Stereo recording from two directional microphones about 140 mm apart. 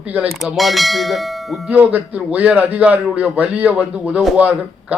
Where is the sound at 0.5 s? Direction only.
Centre (ahead or behind).